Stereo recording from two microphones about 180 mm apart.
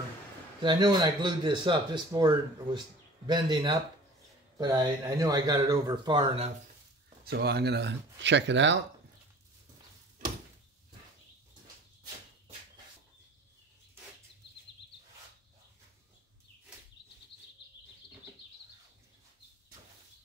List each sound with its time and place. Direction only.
0.6 s speech: 25° right (ahead or behind)
7.2 s speech: 65° right (ahead or behind); by 8.7 s 85° right
17.3 s a sound: 75° left (ahead or behind)